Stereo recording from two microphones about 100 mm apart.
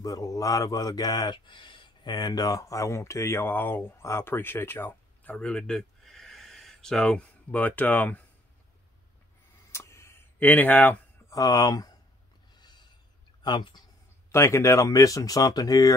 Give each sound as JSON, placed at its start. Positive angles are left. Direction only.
{"t": 0.0, "sound": "speech", "side_deg": 35}
{"t": 5.3, "sound": "speech", "side_deg": 10}
{"t": 9.7, "sound": "a sound", "side_deg": 30}
{"t": 11.2, "sound": "speech", "side_deg": 35}
{"t": 12.5, "sound": "a sound", "side_deg": 45}
{"t": 13.4, "sound": "speech", "side_deg": 50}
{"t": 14.3, "sound": "speech", "side_deg": 30}